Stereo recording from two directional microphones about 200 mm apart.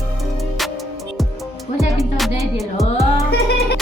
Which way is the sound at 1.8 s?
Centre (ahead or behind).